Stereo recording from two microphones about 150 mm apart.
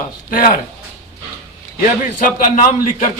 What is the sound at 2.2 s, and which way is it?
Speech, 60° left (ahead or behind).